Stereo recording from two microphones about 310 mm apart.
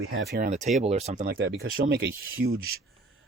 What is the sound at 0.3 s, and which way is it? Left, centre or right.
Speech, right.